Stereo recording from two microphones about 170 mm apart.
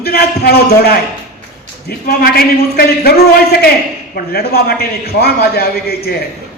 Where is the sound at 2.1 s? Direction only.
65° left (ahead or behind).